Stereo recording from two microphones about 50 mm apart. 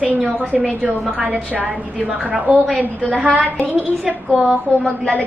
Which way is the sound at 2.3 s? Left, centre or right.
Right.